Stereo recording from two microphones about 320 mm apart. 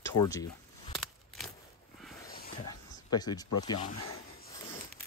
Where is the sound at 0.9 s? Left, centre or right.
Centre.